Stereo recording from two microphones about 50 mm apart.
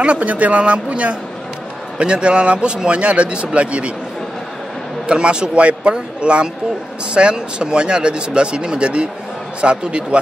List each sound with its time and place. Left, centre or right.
0.0 s speech: right
5.0 s speech: centre